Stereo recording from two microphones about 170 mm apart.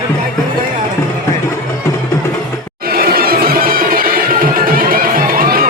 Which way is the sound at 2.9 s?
65° right (ahead or behind).